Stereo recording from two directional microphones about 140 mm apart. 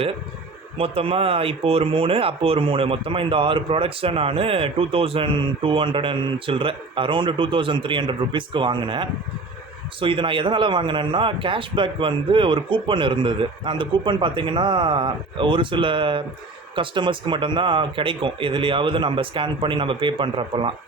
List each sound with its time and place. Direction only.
0.8 s speech: 40° right (ahead or behind)